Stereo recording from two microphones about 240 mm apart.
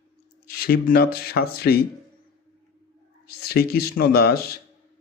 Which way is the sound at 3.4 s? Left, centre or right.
Left.